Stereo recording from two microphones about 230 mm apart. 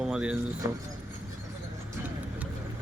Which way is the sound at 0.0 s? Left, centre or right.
Centre.